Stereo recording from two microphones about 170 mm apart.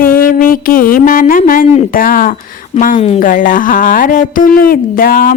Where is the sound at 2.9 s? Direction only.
35° left (ahead or behind).